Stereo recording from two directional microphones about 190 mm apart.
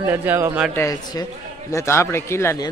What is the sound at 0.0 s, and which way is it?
Speech, 10° right (ahead or behind).